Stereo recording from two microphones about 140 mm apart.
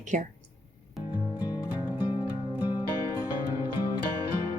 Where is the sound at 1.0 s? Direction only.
Centre (ahead or behind).